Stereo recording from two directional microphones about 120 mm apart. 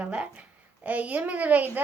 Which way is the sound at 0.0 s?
10° right (ahead or behind).